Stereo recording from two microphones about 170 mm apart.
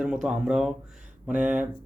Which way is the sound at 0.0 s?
5° right (ahead or behind).